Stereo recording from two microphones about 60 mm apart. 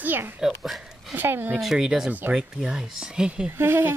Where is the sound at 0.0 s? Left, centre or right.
Right.